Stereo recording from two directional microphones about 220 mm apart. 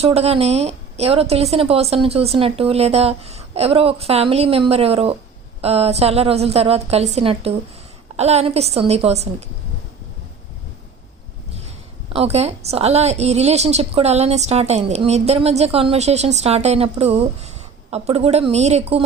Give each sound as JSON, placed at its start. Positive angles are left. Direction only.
{"t": 0.0, "sound": "a woman's voice", "side_deg": -25}
{"t": 12.0, "sound": "a woman's voice", "side_deg": -25}